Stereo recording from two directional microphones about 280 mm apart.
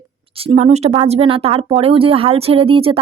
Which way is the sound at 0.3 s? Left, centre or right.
Right.